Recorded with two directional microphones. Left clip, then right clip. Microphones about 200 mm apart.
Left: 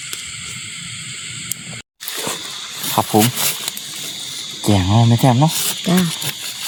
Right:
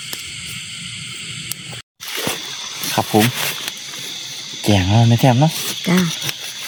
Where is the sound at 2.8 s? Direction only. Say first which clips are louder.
Left 1 dB; centre (ahead or behind).